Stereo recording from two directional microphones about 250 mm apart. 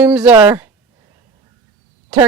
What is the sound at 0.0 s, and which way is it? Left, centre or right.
Speech, centre.